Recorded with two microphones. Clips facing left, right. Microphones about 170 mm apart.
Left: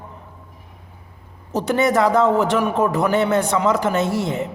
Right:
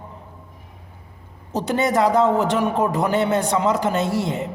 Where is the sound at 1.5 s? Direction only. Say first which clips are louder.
Left 2 dB; 15° right (ahead or behind).